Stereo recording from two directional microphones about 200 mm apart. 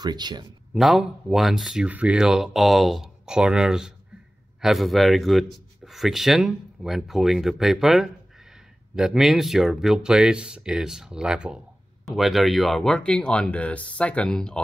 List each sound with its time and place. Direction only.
0.0 s speech: 20° right (ahead or behind)
0.7 s speech: centre (ahead or behind)